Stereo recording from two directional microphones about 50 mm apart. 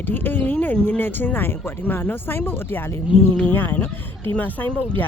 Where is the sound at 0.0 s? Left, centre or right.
Left.